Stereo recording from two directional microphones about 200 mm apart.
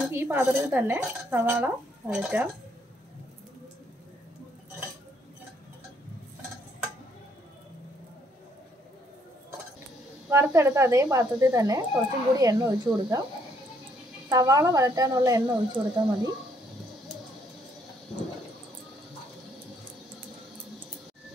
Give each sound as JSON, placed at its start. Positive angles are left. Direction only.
{"t": 0.0, "sound": "speech", "side_deg": -10}
{"t": 10.3, "sound": "speech", "side_deg": -15}
{"t": 14.3, "sound": "speech", "side_deg": -20}